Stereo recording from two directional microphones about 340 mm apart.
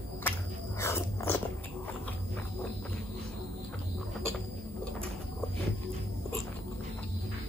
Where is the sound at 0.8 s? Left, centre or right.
Centre.